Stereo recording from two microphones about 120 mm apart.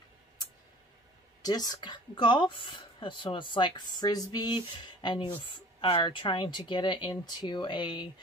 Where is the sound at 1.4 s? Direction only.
35° left (ahead or behind).